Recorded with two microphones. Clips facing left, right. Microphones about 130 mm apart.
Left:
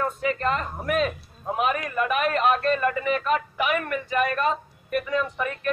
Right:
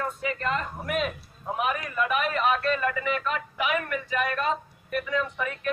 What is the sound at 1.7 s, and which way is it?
A man's voice, 55° left (ahead or behind).